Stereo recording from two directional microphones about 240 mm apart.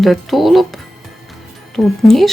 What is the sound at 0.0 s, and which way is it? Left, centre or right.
A woman's voice, centre.